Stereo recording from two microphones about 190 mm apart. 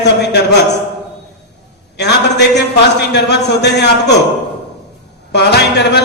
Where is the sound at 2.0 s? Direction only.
60° left (ahead or behind).